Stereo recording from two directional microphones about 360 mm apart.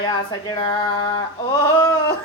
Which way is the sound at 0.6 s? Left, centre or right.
Centre.